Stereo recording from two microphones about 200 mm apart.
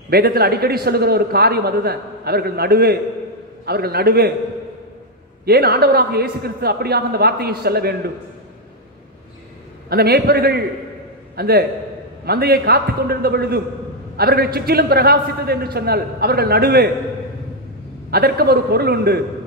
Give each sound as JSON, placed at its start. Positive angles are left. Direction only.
{"t": 0.1, "sound": "a man's voice", "side_deg": -50}
{"t": 5.4, "sound": "a man's voice", "side_deg": -50}
{"t": 9.8, "sound": "a man's voice", "side_deg": -50}
{"t": 18.1, "sound": "a man's voice", "side_deg": -50}